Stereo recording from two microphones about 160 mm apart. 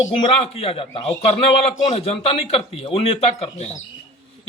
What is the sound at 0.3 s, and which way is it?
Speech, 35° left (ahead or behind).